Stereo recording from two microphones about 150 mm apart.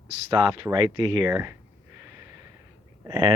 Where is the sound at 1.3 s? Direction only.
15° right (ahead or behind).